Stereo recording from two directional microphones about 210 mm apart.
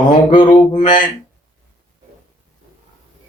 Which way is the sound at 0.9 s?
20° left (ahead or behind).